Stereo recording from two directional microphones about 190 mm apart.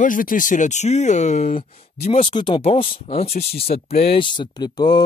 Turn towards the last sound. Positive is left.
turn(degrees=20)  # may be behind; listen again after turning